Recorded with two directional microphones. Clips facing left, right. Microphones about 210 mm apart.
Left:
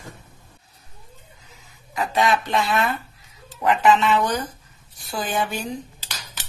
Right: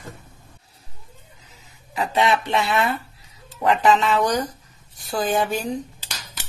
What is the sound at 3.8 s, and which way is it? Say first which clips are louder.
Speech: left 1 dB; 40° right (ahead or behind).